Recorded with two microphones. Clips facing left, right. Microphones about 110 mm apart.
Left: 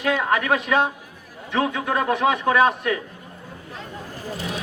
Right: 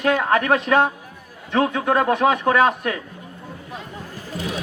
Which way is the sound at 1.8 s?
35° right (ahead or behind).